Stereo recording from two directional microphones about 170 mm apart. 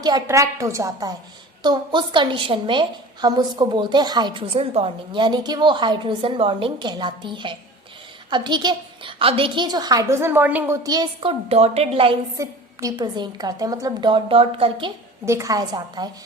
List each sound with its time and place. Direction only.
0.0 s a woman's voice: 20° right (ahead or behind)
10.8 s a woman's voice: 25° right (ahead or behind)
12.4 s a woman's voice: 25° right (ahead or behind)
15.2 s a woman's voice: 15° right (ahead or behind)